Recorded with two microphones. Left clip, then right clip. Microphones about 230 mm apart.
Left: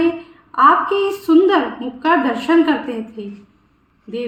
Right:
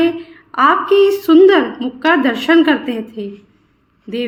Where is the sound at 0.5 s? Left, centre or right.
Right.